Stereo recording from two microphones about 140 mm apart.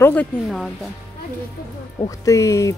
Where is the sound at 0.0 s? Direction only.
10° left (ahead or behind).